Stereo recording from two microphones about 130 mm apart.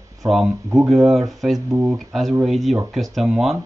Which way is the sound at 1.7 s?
25° right (ahead or behind).